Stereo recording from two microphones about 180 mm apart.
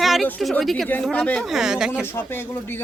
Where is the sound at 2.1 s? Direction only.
10° left (ahead or behind).